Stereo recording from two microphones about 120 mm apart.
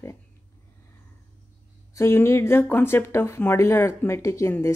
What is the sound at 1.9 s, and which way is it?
Speech, 20° left (ahead or behind).